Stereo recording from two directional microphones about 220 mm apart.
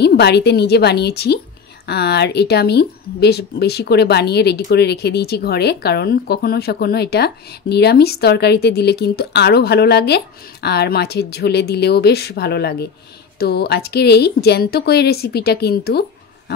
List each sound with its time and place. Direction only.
0.0 s speech: 50° left (ahead or behind)